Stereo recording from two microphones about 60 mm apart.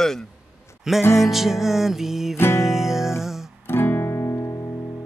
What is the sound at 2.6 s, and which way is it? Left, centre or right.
Music, centre.